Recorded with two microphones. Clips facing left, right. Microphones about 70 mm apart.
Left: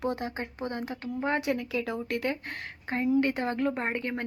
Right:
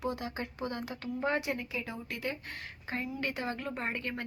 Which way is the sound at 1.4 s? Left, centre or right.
Left.